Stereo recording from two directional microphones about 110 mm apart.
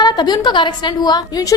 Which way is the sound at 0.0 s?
40° left (ahead or behind).